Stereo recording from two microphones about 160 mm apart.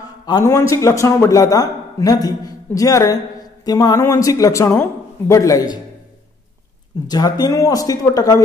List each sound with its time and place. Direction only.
0.3 s a man's voice: 20° left (ahead or behind)
7.1 s a man's voice: 25° left (ahead or behind)